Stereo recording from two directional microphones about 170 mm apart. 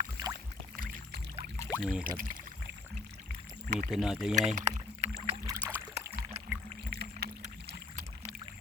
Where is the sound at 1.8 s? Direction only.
5° right (ahead or behind).